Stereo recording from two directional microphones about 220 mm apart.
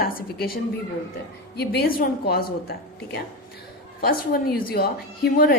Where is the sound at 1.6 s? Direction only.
45° left (ahead or behind).